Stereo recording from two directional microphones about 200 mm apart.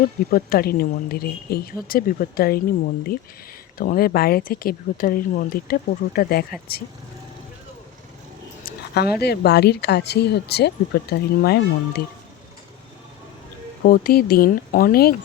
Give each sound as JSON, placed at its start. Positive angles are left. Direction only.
{"t": 0.3, "sound": "a woman's voice", "side_deg": 45}
{"t": 8.6, "sound": "a sound", "side_deg": 50}
{"t": 9.2, "sound": "a woman's voice", "side_deg": 55}
{"t": 13.8, "sound": "a woman's voice", "side_deg": 45}